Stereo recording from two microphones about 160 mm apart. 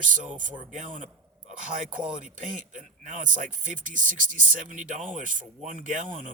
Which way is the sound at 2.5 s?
50° right (ahead or behind).